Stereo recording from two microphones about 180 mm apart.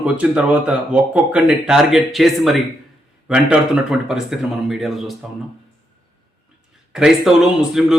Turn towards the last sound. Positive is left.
turn(degrees=-5)  # may be behind; listen again after turning